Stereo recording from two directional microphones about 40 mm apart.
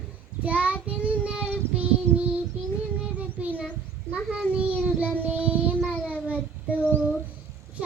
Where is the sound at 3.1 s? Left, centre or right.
Right.